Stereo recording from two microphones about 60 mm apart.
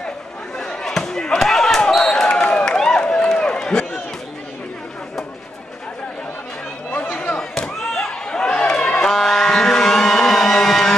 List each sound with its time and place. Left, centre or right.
0.6 s basketball bounce: centre
7.1 s chop: left
7.3 s slam: centre
9.0 s a sound: centre